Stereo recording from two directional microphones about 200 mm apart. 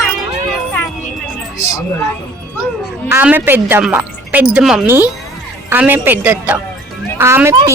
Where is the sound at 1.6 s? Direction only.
15° left (ahead or behind).